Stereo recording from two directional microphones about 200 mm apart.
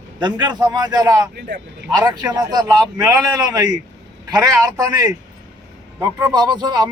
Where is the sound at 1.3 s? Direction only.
60° right (ahead or behind).